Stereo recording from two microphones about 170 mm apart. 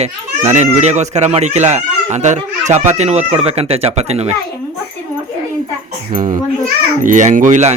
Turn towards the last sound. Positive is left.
turn(degrees=-45)  # may be behind; listen again after turning